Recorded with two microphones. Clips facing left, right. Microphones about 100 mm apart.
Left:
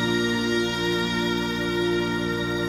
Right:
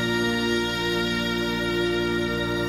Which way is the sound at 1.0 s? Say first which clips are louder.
Left 1 dB; 40° left (ahead or behind).